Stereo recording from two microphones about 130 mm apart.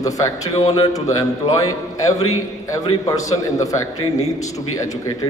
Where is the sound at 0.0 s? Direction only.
25° left (ahead or behind).